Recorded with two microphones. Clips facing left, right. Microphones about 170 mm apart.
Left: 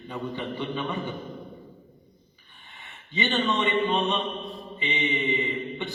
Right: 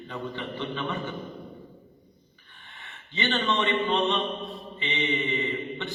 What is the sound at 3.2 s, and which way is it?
Mantra, 15° left (ahead or behind).